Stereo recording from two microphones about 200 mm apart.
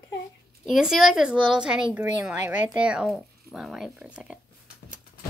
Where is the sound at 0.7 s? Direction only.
Centre (ahead or behind).